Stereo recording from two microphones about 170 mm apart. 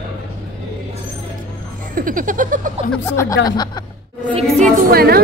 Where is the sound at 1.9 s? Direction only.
55° right (ahead or behind).